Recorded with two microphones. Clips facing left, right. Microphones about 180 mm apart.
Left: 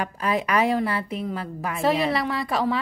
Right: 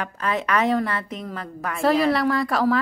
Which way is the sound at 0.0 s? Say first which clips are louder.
Left 1 dB; 10° left (ahead or behind).